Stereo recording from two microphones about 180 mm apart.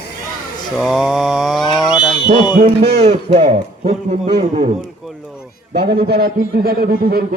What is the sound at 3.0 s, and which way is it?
Speech, 35° right (ahead or behind).